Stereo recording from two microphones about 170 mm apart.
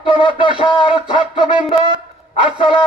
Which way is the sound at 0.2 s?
30° right (ahead or behind).